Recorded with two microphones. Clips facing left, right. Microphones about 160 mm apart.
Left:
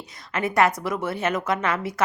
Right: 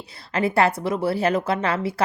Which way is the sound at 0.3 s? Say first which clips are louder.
Right 1 dB; 30° right (ahead or behind).